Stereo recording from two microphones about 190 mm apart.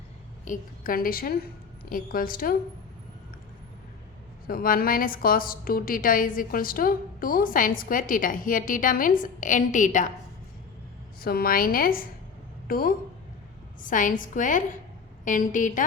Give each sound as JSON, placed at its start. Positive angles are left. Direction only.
{"t": 0.4, "sound": "a woman's voice", "side_deg": 45}
{"t": 4.4, "sound": "a woman's voice", "side_deg": 50}
{"t": 11.2, "sound": "a woman's voice", "side_deg": 50}